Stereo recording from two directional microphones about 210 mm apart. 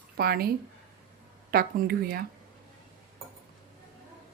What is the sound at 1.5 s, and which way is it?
Speech, 45° right (ahead or behind).